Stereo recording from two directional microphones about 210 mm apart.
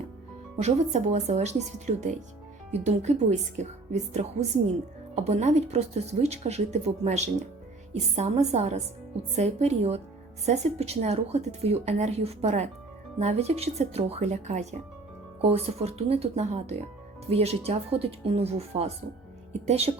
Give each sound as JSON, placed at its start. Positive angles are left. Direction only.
{"t": 0.6, "sound": "speech", "side_deg": -30}